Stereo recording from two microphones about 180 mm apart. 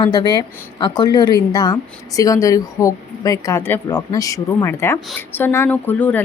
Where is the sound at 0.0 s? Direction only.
20° left (ahead or behind).